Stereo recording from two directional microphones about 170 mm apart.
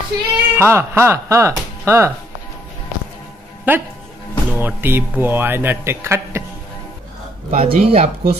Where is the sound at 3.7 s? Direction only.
10° right (ahead or behind).